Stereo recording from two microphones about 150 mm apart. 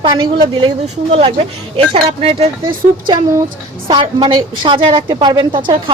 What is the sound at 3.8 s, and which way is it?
A woman's voice, 35° right (ahead or behind).